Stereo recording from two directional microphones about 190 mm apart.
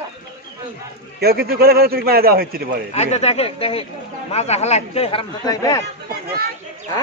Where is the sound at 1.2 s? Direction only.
55° right (ahead or behind).